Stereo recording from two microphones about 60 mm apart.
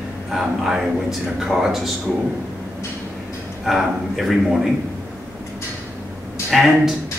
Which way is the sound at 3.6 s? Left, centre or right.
Centre.